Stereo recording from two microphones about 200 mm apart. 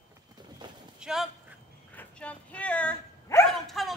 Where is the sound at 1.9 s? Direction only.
5° left (ahead or behind).